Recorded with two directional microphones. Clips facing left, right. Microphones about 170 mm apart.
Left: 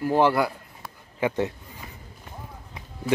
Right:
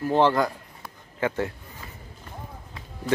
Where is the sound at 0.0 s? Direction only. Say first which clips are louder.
Even; 10° left (ahead or behind).